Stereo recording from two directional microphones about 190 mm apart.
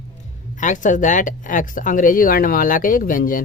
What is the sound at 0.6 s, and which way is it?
Speech, 40° left (ahead or behind).